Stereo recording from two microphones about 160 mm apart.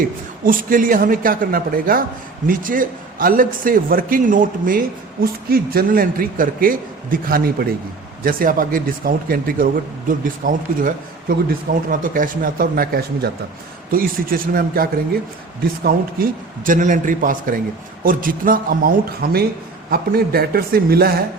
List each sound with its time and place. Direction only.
0.4 s speech: 60° right (ahead or behind)
5.2 s speech: 70° right (ahead or behind)
13.9 s a man's voice: 65° right (ahead or behind)
16.6 s a man's voice: 55° right (ahead or behind); by 21.1 s 70° right (ahead or behind)